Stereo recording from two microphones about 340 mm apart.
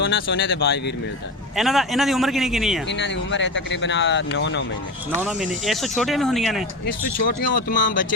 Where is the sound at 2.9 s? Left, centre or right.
Left.